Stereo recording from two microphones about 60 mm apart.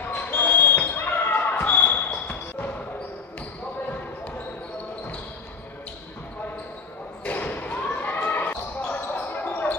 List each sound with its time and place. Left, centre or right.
0.0 s basketball bounce: left
7.2 s basketball bounce: left